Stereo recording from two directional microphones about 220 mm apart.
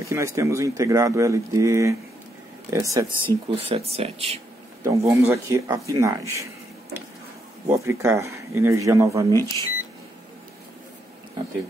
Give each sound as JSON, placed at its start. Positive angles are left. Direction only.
{"t": 0.1, "sound": "speech", "side_deg": -15}
{"t": 3.3, "sound": "speech", "side_deg": -25}
{"t": 4.8, "sound": "speech", "side_deg": -15}
{"t": 7.6, "sound": "speech", "side_deg": -15}
{"t": 9.4, "sound": "speech", "side_deg": 15}